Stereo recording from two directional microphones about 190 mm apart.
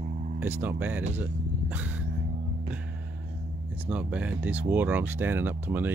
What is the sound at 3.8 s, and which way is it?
Speech, 5° right (ahead or behind).